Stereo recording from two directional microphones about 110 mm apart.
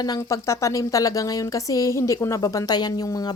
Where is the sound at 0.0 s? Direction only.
30° left (ahead or behind).